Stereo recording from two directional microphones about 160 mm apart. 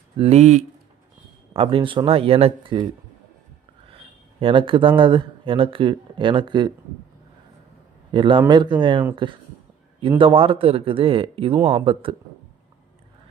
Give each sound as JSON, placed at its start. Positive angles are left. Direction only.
{"t": 0.2, "sound": "speech", "side_deg": -40}
{"t": 1.5, "sound": "speech", "side_deg": -35}
{"t": 4.4, "sound": "speech", "side_deg": -35}
{"t": 8.1, "sound": "speech", "side_deg": -30}
{"t": 10.2, "sound": "speech", "side_deg": -35}